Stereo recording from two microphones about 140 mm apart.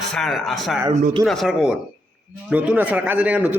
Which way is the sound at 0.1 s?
Centre (ahead or behind).